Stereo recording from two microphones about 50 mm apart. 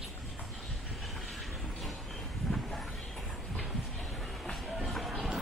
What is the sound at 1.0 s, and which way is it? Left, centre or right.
Train, centre.